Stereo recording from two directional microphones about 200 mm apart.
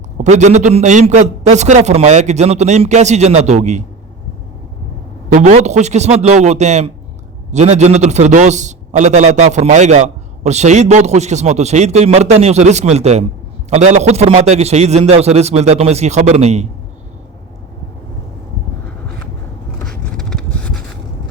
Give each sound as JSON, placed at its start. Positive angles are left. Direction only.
{"t": 0.2, "sound": "a man's voice", "side_deg": -35}
{"t": 5.3, "sound": "a man's voice", "side_deg": -35}
{"t": 19.8, "sound": "vehicle", "side_deg": 5}